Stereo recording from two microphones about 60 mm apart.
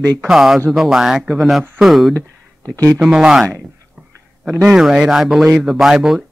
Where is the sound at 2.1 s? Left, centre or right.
Right.